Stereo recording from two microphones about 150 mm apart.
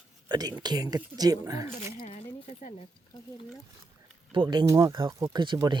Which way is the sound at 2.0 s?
50° left (ahead or behind).